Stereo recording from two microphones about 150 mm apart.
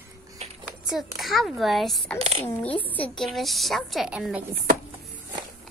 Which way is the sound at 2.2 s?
45° right (ahead or behind).